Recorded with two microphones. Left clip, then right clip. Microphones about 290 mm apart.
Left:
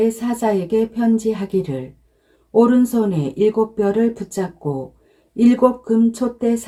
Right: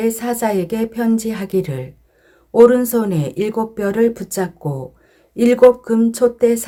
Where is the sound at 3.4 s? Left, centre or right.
Right.